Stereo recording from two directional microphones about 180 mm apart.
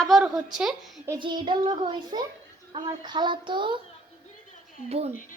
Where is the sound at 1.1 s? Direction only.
25° right (ahead or behind).